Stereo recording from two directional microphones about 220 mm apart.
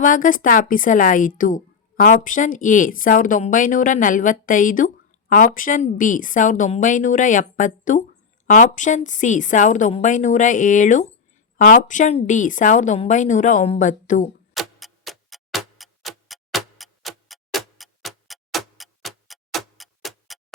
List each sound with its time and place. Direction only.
0.0 s a woman's voice: 35° left (ahead or behind)
14.5 s tick-tock: centre (ahead or behind)